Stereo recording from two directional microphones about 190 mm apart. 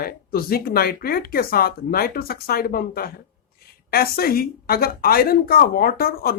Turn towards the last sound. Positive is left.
turn(degrees=50)  # may be behind; listen again after turning